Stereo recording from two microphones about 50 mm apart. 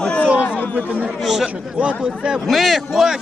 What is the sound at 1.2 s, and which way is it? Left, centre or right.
Speech, centre.